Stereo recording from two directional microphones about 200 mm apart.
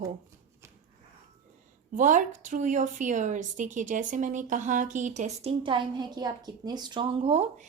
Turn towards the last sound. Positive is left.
turn(degrees=-30)  # may be behind; listen again after turning